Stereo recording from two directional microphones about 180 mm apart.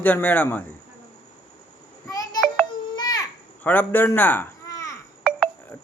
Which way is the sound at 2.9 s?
20° left (ahead or behind).